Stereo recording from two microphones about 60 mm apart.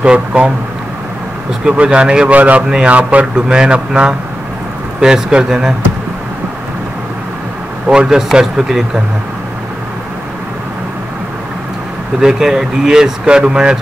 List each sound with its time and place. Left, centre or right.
0.0 s speech: centre
1.6 s speech: centre
7.9 s speech: centre
12.2 s speech: centre